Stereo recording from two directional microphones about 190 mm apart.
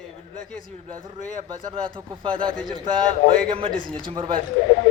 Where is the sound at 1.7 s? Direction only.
25° right (ahead or behind).